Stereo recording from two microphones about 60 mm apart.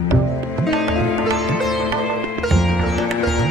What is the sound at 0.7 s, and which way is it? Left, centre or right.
Sitar, centre.